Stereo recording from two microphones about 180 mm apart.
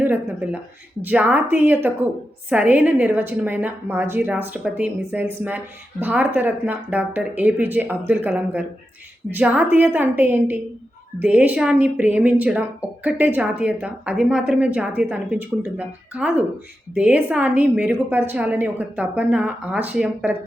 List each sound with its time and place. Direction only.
0.0 s a woman's voice: 10° right (ahead or behind)